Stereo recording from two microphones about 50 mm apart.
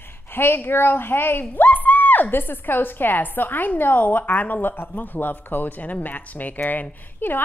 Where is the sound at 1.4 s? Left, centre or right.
Left.